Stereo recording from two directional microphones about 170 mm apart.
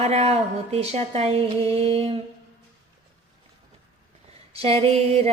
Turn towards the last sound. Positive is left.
turn(degrees=-35)  # may be behind; listen again after turning